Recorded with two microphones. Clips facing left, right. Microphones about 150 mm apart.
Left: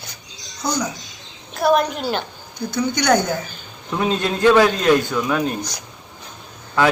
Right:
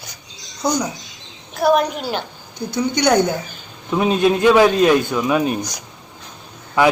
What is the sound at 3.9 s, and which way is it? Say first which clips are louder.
A man's voice: right 5 dB; 15° right (ahead or behind).